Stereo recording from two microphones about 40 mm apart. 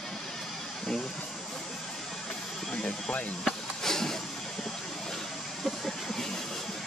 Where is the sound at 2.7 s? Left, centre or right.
Left.